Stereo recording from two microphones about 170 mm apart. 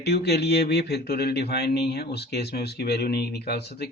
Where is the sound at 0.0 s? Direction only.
75° left (ahead or behind).